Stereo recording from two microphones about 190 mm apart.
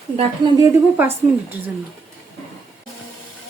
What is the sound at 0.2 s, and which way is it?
Speech, 20° right (ahead or behind).